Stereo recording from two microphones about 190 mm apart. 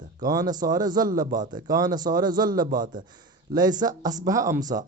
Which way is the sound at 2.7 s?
45° right (ahead or behind).